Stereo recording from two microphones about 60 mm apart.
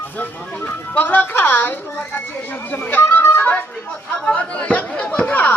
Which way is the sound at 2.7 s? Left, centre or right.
Left.